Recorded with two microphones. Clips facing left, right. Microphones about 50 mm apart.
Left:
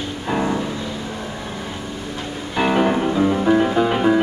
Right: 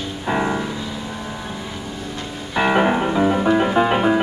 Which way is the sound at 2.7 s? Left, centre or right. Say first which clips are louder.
Right 1 dB; right.